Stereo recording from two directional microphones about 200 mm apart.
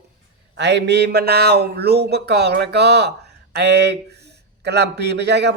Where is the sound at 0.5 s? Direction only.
60° right (ahead or behind).